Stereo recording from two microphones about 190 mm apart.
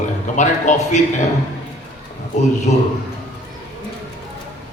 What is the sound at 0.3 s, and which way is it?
Speech, 40° left (ahead or behind).